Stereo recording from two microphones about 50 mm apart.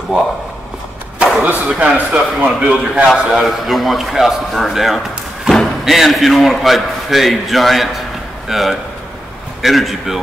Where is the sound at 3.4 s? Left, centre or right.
Centre.